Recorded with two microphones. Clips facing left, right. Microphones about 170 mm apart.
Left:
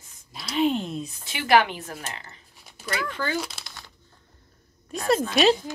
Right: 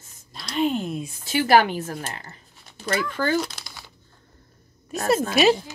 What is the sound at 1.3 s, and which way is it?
Speech, 40° right (ahead or behind).